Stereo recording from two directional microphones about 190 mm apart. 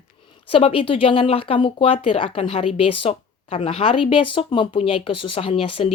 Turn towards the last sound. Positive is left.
turn(degrees=30)  # may be behind; listen again after turning